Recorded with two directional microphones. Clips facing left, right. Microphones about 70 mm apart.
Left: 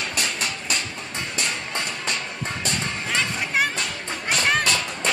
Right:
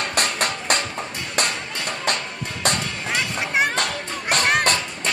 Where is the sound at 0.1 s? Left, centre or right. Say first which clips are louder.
Right 5 dB; right.